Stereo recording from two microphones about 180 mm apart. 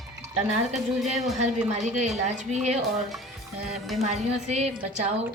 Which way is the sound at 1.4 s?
40° right (ahead or behind).